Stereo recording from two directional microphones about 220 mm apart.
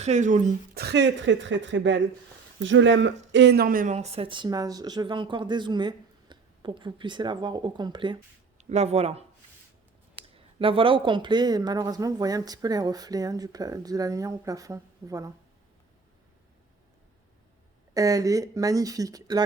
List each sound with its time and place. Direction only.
0.0 s a woman's voice: 30° right (ahead or behind); by 15.3 s 15° right (ahead or behind)
17.9 s speech: 15° right (ahead or behind)